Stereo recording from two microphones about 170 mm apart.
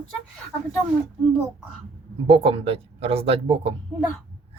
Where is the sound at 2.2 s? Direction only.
35° right (ahead or behind).